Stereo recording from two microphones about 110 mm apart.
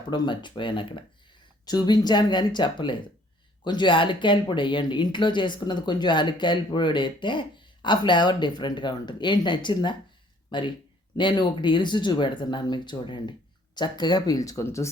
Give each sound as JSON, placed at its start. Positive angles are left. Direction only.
{"t": 0.1, "sound": "speech", "side_deg": 45}